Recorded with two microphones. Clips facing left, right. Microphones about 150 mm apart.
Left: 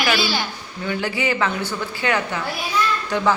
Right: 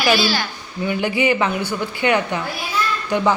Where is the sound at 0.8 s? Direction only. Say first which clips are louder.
Right 4 dB; 15° right (ahead or behind).